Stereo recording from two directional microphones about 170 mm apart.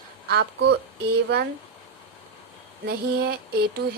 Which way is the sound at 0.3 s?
70° right (ahead or behind).